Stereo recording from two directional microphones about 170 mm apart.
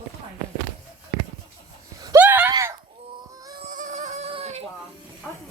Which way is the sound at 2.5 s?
20° right (ahead or behind).